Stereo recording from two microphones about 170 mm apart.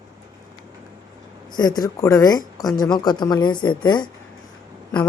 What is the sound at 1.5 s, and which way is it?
A woman's voice, 25° left (ahead or behind).